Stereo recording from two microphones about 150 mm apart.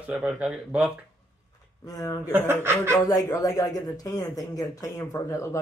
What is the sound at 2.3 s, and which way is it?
Speech, 15° right (ahead or behind).